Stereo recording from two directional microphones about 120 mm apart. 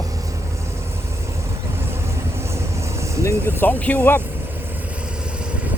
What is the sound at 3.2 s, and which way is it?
Speech, 15° left (ahead or behind).